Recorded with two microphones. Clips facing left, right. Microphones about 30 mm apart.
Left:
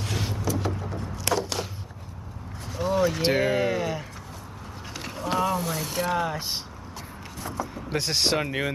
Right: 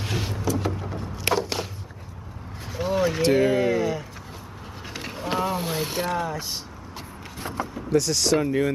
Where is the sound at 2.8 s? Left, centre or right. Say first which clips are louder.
Even; centre.